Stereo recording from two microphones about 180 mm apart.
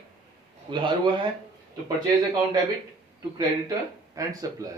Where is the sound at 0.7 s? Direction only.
25° right (ahead or behind).